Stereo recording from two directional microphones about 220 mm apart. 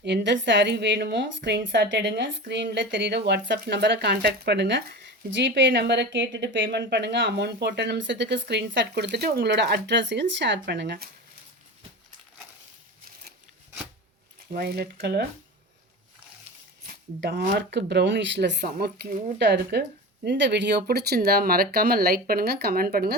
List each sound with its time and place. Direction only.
0.0 s a woman's voice: 50° right (ahead or behind)
14.5 s a woman's voice: 45° right (ahead or behind)
16.8 s a woman's voice: 45° right (ahead or behind)